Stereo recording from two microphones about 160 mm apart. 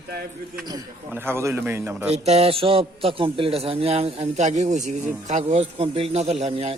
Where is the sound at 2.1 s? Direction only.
40° right (ahead or behind).